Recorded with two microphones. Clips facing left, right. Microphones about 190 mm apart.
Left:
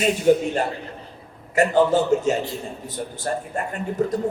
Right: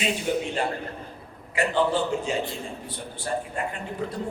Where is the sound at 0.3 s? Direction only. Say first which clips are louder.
Left 11 dB; 45° left (ahead or behind).